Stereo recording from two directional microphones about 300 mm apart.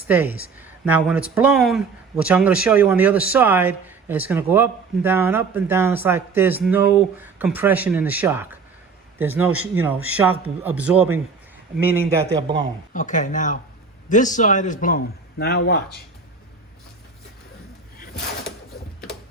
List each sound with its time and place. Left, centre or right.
0.1 s speech: centre
12.9 s a man's voice: left